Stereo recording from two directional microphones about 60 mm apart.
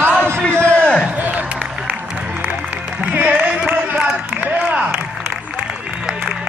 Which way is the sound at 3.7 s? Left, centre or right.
Right.